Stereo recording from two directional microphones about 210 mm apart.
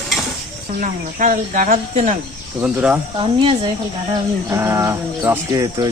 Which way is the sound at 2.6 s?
10° right (ahead or behind).